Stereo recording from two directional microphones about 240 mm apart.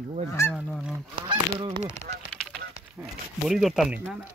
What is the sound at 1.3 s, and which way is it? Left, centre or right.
Speech, right.